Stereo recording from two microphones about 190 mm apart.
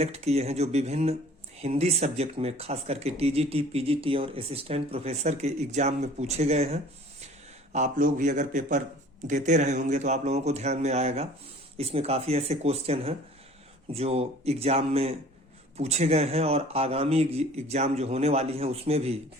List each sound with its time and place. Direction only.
0.0 s speech: 35° right (ahead or behind)